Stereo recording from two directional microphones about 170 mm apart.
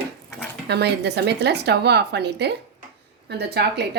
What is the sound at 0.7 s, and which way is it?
Speech, 75° right (ahead or behind).